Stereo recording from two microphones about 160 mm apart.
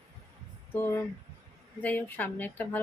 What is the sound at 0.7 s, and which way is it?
Speech, 15° left (ahead or behind).